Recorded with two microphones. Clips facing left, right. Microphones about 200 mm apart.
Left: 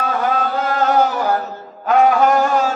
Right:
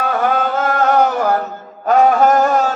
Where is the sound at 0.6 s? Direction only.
55° right (ahead or behind).